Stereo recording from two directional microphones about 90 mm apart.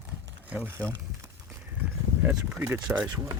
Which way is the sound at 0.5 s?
15° right (ahead or behind).